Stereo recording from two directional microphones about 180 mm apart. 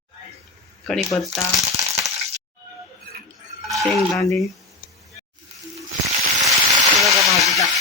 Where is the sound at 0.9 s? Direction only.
Centre (ahead or behind).